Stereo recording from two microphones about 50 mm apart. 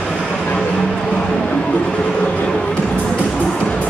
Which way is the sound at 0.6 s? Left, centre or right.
Centre.